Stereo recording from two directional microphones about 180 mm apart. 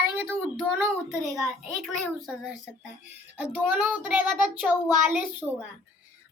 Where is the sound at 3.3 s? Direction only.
10° right (ahead or behind).